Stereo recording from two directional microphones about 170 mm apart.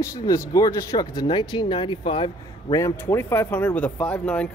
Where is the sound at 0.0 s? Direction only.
20° left (ahead or behind).